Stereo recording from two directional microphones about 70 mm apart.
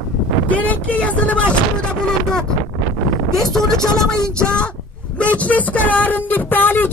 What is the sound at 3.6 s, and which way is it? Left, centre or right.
Chopping, centre.